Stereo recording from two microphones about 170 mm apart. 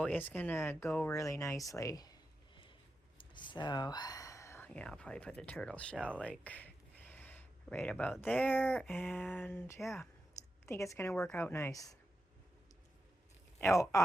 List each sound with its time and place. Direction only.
0.0 s speech: 10° left (ahead or behind)
3.2 s speech: 30° left (ahead or behind); by 6.1 s 5° left (ahead or behind)
6.2 s a sound: 10° left (ahead or behind)
8.2 s speech: 10° left (ahead or behind)
11.3 s speech: 15° left (ahead or behind)
13.6 s speech: 15° left (ahead or behind)